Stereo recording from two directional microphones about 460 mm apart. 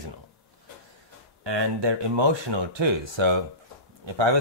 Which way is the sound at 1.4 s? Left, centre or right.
Right.